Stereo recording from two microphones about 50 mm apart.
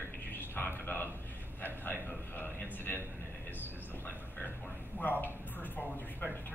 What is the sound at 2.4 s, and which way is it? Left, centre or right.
Speech, left.